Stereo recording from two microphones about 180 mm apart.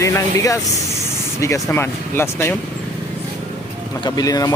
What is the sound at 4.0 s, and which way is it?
Speech, 20° left (ahead or behind).